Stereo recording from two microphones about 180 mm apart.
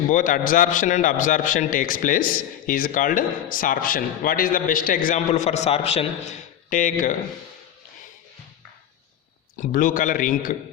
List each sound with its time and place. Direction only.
0.1 s a man's voice: 50° left (ahead or behind)
9.6 s a man's voice: 50° left (ahead or behind)